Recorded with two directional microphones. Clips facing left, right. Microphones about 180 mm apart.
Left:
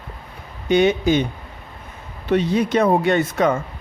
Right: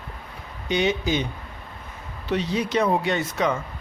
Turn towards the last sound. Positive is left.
turn(degrees=50)  # may be behind; listen again after turning